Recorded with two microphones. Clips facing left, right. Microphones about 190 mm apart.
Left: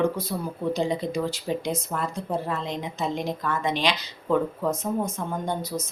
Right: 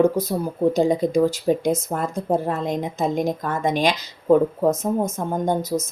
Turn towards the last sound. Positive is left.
turn(degrees=-45)  # may be behind; listen again after turning